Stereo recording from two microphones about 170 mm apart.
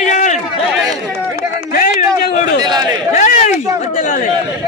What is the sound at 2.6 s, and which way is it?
Speech, 25° right (ahead or behind).